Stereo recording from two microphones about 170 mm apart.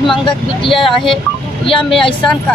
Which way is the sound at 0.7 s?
Centre (ahead or behind).